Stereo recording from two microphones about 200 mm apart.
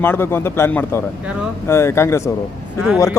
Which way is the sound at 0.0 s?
10° left (ahead or behind).